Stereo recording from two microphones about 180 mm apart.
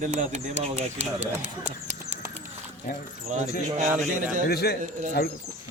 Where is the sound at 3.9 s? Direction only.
45° right (ahead or behind).